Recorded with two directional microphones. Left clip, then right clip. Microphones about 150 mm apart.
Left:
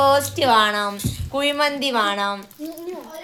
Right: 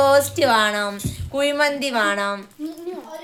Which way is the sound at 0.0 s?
20° right (ahead or behind).